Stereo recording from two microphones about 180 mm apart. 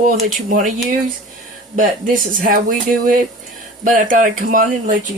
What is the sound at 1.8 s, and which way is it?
Speech, 50° right (ahead or behind).